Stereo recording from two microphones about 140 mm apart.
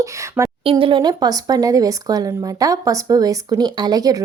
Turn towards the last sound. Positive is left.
turn(degrees=-25)  # may be behind; listen again after turning